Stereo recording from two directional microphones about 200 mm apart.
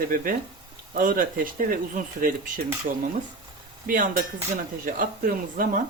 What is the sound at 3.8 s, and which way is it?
Cutlery, 45° right (ahead or behind).